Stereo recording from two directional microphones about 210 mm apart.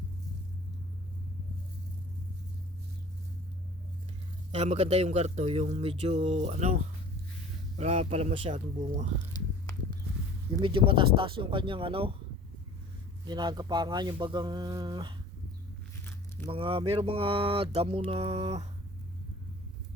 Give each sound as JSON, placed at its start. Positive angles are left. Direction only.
{"t": 4.5, "sound": "a man's voice", "side_deg": -30}
{"t": 7.8, "sound": "mantra", "side_deg": -30}
{"t": 10.6, "sound": "mantra", "side_deg": -25}
{"t": 13.2, "sound": "mantra", "side_deg": -20}
{"t": 16.5, "sound": "mantra", "side_deg": -25}